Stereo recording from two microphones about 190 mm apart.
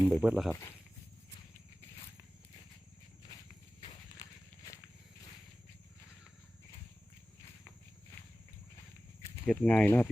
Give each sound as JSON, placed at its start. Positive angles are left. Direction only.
{"t": 0.1, "sound": "speech", "side_deg": -5}
{"t": 3.8, "sound": "horse", "side_deg": 20}
{"t": 9.5, "sound": "speech", "side_deg": 5}